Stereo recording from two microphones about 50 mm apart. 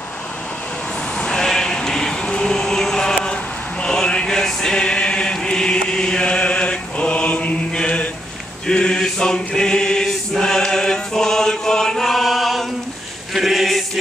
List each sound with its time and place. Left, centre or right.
1.1 s sheep: left
2.2 s a sound: centre
3.8 s chant: centre
13.3 s choir: centre